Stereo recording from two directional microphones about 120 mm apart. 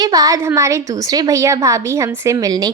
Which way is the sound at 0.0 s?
30° right (ahead or behind).